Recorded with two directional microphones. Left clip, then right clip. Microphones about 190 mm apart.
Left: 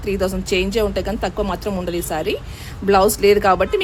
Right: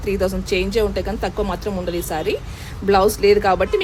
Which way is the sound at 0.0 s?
5° left (ahead or behind).